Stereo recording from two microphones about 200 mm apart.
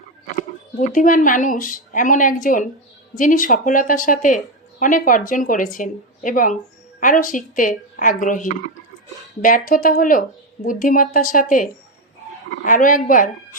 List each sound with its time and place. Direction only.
0.3 s speech: 40° left (ahead or behind)